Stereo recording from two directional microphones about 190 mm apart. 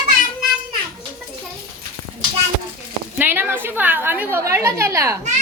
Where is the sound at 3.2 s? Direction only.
10° right (ahead or behind).